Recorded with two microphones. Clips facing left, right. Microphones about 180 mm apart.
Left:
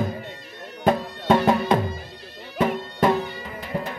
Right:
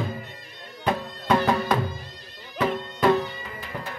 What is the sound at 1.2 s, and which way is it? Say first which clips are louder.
Music: left 3 dB; 25° left (ahead or behind).